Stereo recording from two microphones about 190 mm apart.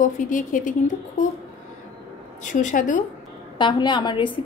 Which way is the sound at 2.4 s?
40° left (ahead or behind).